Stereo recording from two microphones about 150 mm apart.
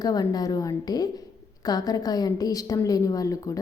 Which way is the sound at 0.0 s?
25° left (ahead or behind).